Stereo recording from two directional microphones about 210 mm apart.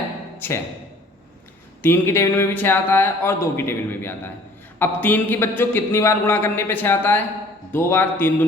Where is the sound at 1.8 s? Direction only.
10° left (ahead or behind).